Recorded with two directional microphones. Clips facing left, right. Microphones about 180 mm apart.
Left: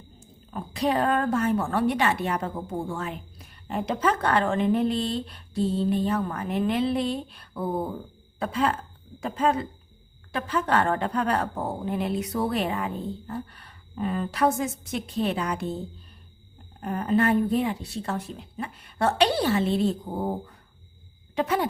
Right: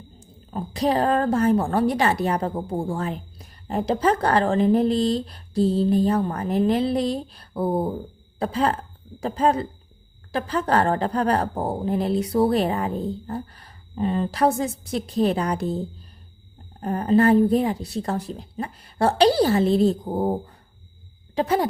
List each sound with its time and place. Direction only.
0.5 s a woman's voice: 35° right (ahead or behind)
16.8 s a woman's voice: 35° right (ahead or behind)